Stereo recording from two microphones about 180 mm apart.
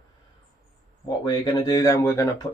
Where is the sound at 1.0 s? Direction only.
20° left (ahead or behind).